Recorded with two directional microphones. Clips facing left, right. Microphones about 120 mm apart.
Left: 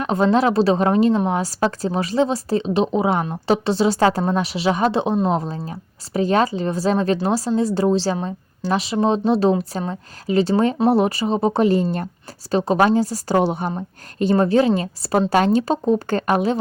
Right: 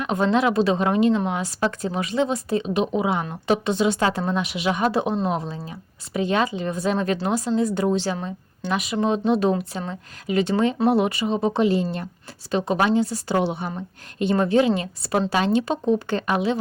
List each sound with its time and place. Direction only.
0.0 s a woman's voice: 35° left (ahead or behind)
6.1 s a woman's voice: 40° left (ahead or behind)
12.5 s a woman's voice: 35° left (ahead or behind)
15.3 s speech: 50° left (ahead or behind)